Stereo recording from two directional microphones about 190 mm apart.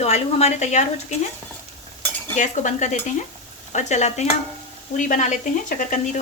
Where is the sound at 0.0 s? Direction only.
35° left (ahead or behind).